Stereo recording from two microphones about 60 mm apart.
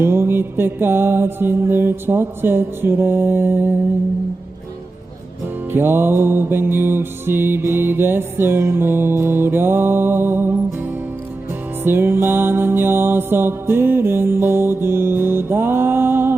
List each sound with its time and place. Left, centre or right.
0.0 s mantra: right
5.7 s mantra: right
11.8 s mantra: right